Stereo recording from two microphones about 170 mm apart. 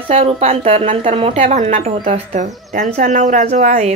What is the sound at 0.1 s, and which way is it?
A woman's voice, 40° right (ahead or behind).